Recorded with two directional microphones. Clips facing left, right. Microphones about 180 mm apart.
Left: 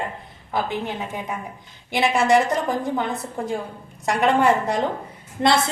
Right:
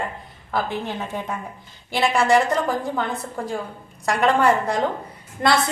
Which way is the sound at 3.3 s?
20° left (ahead or behind).